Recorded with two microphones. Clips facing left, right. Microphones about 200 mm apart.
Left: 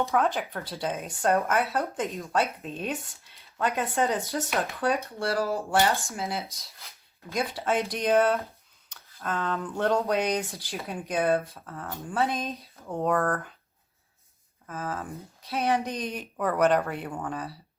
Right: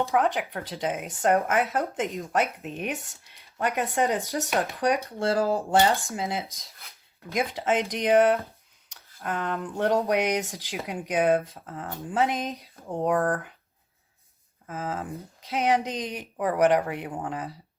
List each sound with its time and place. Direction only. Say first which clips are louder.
0.1 s speech: right 1 dB; 15° right (ahead or behind)
5.4 s speech: right 3 dB; 30° right (ahead or behind)
5.7 s speech: right 2 dB; 15° right (ahead or behind)
14.7 s speech: right 2 dB; 20° right (ahead or behind)